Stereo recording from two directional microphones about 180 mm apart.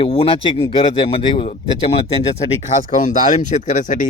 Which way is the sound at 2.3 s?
45° left (ahead or behind).